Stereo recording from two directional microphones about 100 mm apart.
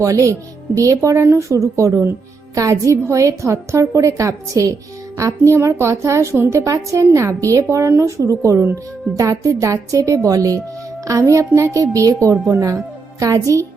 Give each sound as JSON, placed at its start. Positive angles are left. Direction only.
{"t": 0.0, "sound": "a woman's voice", "side_deg": -35}